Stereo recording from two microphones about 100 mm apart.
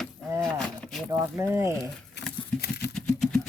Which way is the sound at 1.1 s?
25° right (ahead or behind).